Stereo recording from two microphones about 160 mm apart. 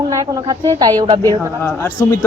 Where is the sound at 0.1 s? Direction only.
25° right (ahead or behind).